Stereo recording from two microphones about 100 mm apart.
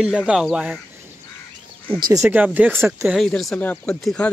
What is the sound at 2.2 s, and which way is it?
Speech, 15° right (ahead or behind).